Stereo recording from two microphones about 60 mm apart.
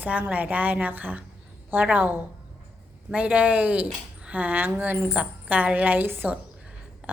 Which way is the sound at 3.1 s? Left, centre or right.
Right.